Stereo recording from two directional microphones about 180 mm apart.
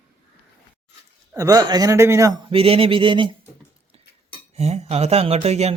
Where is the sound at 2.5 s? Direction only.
30° right (ahead or behind).